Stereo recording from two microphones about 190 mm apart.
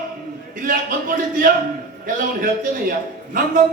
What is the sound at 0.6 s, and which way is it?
Music, 45° right (ahead or behind).